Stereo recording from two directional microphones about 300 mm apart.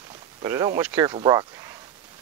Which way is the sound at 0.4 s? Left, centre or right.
Centre.